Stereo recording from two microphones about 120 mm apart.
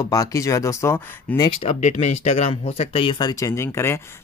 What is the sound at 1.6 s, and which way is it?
Speech, 65° left (ahead or behind).